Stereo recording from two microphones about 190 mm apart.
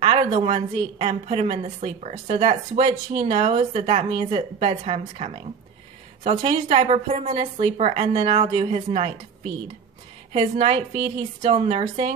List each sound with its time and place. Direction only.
0.0 s a woman's voice: 30° right (ahead or behind)
6.5 s a woman's voice: 35° right (ahead or behind)
10.3 s a woman's voice: 40° right (ahead or behind)